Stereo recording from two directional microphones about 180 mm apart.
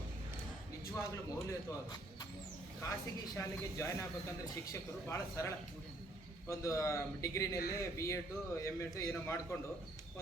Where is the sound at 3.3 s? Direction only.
15° left (ahead or behind).